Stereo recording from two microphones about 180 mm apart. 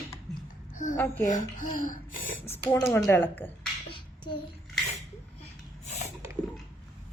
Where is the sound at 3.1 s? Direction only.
10° left (ahead or behind).